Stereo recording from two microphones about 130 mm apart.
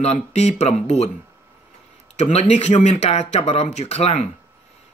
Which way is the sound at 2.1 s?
60° left (ahead or behind).